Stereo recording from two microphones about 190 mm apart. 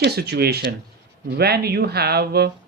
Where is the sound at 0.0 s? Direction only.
55° right (ahead or behind).